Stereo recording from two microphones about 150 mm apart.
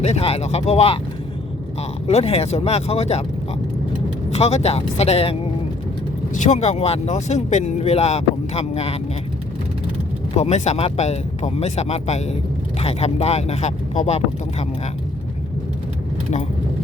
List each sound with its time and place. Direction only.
0.0 s speech: 45° left (ahead or behind)
2.0 s speech: 45° left (ahead or behind)
4.3 s speech: 45° left (ahead or behind)
6.3 s speech: 50° left (ahead or behind)
10.3 s speech: 45° left (ahead or behind)